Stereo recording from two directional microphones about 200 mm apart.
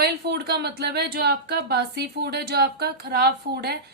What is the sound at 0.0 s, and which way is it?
A woman's voice, 55° right (ahead or behind).